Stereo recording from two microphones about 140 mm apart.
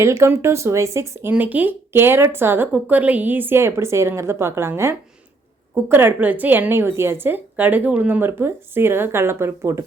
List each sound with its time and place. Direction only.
0.0 s speech: 20° right (ahead or behind)